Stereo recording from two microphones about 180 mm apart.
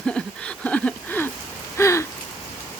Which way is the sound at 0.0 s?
5° left (ahead or behind).